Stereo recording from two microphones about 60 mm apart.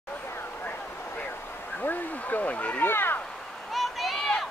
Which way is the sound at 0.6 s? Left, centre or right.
Left.